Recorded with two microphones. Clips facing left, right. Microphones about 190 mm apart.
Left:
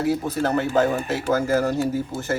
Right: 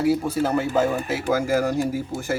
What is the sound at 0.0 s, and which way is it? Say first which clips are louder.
Speech: right 1 dB; 10° right (ahead or behind).